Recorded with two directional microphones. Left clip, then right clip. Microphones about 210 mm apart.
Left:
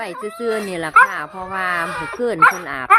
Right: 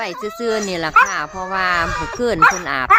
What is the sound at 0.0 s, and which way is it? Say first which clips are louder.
Speech: right 2 dB; 5° right (ahead or behind).